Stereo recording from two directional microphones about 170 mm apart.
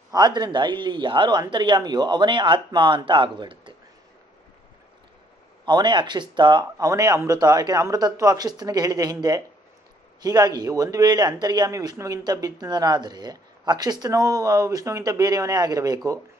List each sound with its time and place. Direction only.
0.1 s speech: 25° right (ahead or behind)
5.7 s speech: 25° right (ahead or behind)
10.2 s speech: 20° right (ahead or behind)